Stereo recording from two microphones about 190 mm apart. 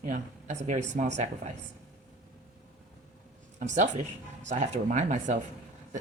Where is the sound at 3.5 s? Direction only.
40° right (ahead or behind).